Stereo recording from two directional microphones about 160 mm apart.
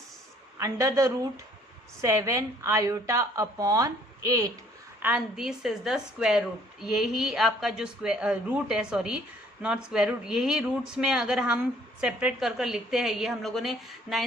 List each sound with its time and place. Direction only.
0.6 s speech: 20° right (ahead or behind)
5.0 s a woman's voice: 5° right (ahead or behind)